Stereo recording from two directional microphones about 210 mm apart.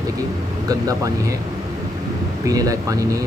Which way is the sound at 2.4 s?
15° right (ahead or behind).